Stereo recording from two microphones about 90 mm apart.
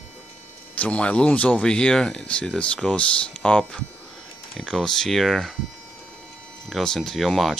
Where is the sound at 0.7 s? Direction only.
15° left (ahead or behind).